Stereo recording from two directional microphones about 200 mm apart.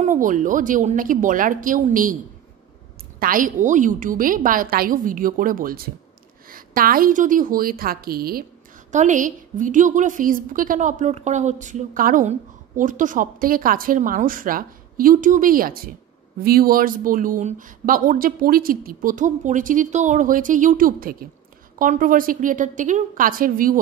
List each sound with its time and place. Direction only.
0.0 s a woman's voice: 40° right (ahead or behind)
3.2 s a woman's voice: 45° right (ahead or behind)